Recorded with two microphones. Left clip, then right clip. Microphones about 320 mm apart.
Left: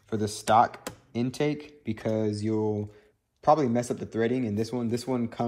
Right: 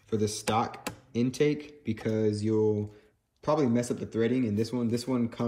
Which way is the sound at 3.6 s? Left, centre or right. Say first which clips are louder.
Left 1 dB; centre.